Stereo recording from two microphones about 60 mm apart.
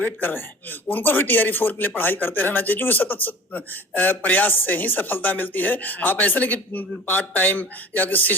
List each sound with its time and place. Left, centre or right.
0.0 s a man's voice: left